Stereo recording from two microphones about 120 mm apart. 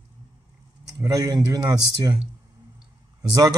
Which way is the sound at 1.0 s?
30° right (ahead or behind).